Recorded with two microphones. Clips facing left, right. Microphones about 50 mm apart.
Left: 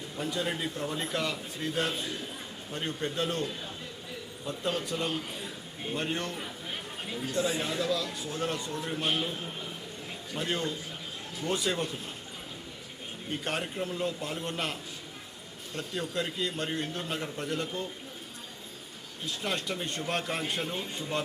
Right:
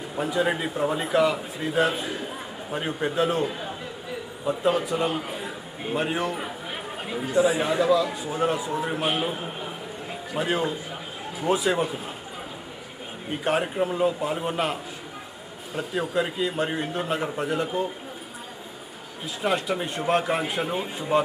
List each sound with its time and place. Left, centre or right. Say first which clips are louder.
0.2 s a man's voice: right 8 dB; centre
5.3 s a sound: right 7 dB; right
6.3 s a man's voice: right 6 dB; right
10.3 s a man's voice: right 7 dB; centre
13.3 s a man's voice: right 9 dB; centre
19.4 s a man's voice: right 9 dB; centre